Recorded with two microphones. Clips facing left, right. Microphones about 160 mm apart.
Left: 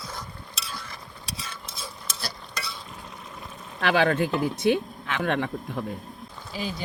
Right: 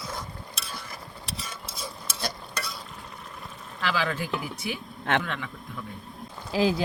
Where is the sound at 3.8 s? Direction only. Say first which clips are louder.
Left 7 dB; 65° left (ahead or behind).